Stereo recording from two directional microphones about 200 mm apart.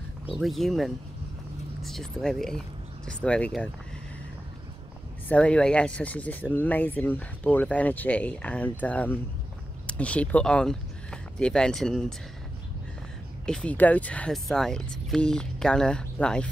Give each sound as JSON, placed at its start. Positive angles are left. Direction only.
{"t": 0.3, "sound": "speech", "side_deg": 0}
{"t": 5.3, "sound": "speech", "side_deg": 5}
{"t": 13.5, "sound": "speech", "side_deg": 5}